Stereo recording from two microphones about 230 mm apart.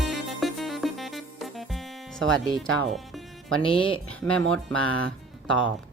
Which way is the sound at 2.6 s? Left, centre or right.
Centre.